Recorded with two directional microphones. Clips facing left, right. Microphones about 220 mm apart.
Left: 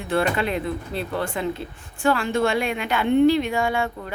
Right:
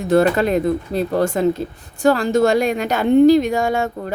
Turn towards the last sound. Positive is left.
turn(degrees=-40)  # may be behind; listen again after turning